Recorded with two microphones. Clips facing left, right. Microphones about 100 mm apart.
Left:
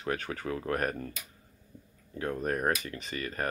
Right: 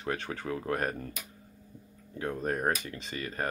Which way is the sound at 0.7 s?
20° right (ahead or behind).